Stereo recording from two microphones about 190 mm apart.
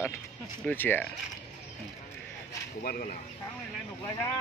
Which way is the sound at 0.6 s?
10° left (ahead or behind).